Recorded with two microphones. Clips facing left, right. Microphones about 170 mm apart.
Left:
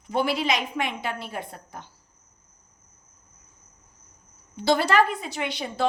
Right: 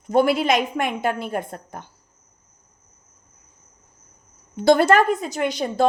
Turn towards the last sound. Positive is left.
turn(degrees=-45)  # may be behind; listen again after turning